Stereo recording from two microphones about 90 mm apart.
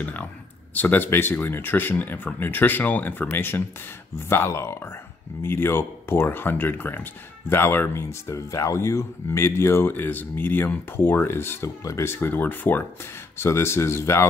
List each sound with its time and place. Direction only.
0.0 s speech: 15° left (ahead or behind)